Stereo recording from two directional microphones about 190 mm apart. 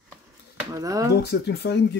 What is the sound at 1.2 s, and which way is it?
Speech, 60° left (ahead or behind).